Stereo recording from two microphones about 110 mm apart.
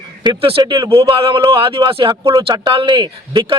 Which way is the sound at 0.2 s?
50° right (ahead or behind).